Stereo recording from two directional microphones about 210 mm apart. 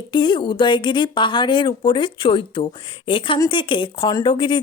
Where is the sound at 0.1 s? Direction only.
20° left (ahead or behind).